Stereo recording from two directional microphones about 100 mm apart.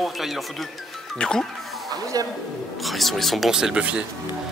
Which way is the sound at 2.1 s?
40° right (ahead or behind).